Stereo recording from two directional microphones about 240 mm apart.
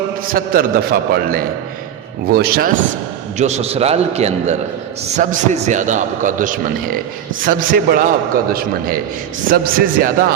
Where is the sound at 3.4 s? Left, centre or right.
Right.